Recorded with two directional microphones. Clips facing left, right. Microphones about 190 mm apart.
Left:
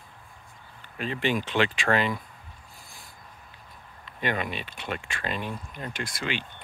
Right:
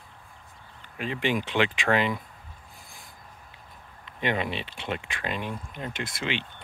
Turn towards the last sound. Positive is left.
turn(degrees=-25)  # may be behind; listen again after turning